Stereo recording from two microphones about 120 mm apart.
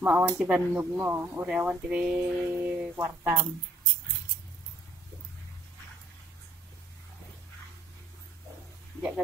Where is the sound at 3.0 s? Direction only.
25° right (ahead or behind).